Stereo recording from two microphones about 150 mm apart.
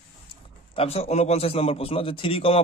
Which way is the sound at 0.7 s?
40° left (ahead or behind).